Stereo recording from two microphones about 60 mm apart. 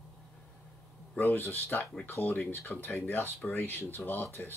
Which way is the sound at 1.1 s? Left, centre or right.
Left.